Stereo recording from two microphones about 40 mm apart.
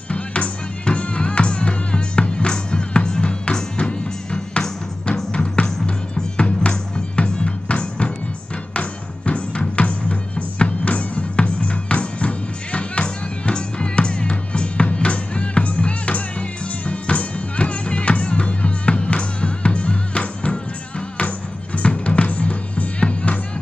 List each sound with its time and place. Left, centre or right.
0.1 s music: left
21.7 s music: left